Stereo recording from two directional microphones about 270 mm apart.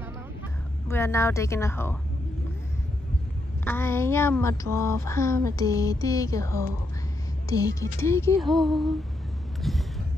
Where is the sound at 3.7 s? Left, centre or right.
Centre.